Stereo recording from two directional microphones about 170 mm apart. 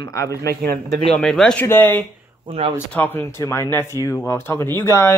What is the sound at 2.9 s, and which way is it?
Speech, 10° left (ahead or behind).